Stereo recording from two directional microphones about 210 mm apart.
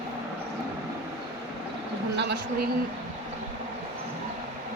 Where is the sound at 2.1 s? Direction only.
55° right (ahead or behind).